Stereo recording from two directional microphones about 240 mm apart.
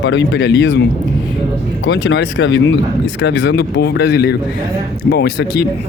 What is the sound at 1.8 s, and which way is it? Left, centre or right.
Speech, left.